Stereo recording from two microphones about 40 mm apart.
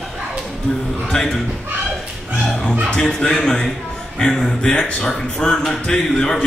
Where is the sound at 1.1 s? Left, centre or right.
Centre.